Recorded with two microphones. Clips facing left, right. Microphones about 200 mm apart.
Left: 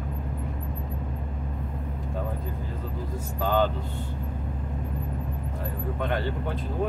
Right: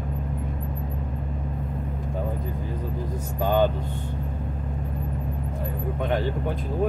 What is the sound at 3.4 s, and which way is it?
Vehicle, 15° right (ahead or behind).